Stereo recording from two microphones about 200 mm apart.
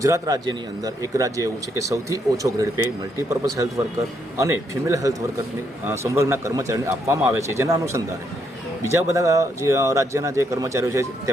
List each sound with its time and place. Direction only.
0.0 s speech: 15° right (ahead or behind)